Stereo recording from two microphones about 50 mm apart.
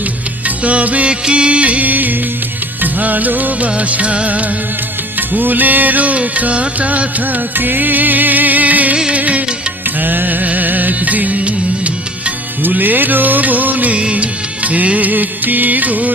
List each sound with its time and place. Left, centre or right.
0.4 s music: right
12.6 s music: right